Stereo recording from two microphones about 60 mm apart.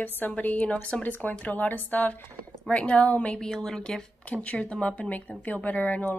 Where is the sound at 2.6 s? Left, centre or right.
Centre.